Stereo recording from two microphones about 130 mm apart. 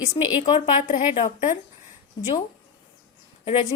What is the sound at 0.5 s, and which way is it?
Speech, 55° left (ahead or behind).